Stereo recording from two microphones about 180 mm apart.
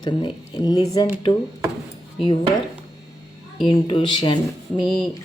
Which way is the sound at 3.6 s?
30° left (ahead or behind).